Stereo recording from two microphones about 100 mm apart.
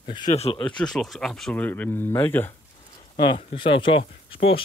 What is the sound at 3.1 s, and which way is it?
Speech, 50° left (ahead or behind).